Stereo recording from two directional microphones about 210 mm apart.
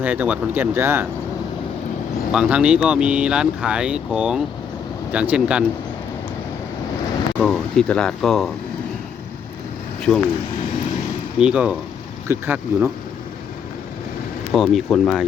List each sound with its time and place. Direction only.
0.0 s speech: 10° right (ahead or behind)
2.3 s speech: 5° right (ahead or behind)
7.3 s speech: 5° left (ahead or behind)
10.1 s speech: 15° left (ahead or behind)
11.3 s speech: 5° right (ahead or behind)
14.5 s speech: centre (ahead or behind)